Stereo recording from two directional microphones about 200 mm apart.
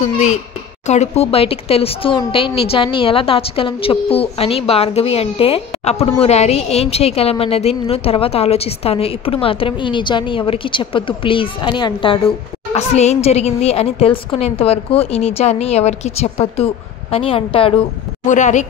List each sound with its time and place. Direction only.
0.8 s a woman's voice: 35° left (ahead or behind)